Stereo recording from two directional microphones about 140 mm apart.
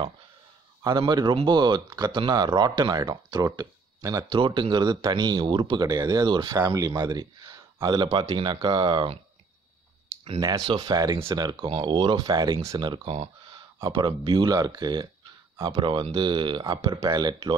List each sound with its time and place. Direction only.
0.8 s speech: 30° right (ahead or behind)
4.3 s a man's voice: 35° right (ahead or behind)
10.7 s a man's voice: 30° right (ahead or behind)